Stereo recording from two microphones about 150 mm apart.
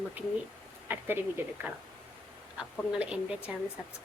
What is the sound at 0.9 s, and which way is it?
Speech, 10° right (ahead or behind).